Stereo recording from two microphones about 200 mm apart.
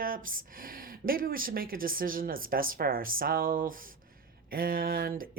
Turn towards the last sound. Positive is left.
turn(degrees=-45)  # may be behind; listen again after turning